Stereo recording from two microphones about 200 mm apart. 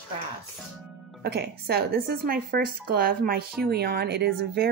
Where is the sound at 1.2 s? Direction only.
55° right (ahead or behind).